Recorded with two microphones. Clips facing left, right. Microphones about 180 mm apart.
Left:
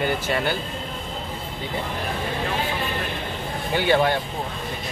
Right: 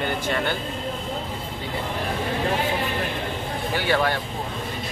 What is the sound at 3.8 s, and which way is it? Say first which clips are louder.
Speech: left 3 dB; 20° left (ahead or behind).